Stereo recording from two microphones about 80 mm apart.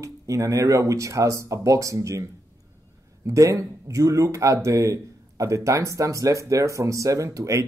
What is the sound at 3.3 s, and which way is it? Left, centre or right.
Speech, right.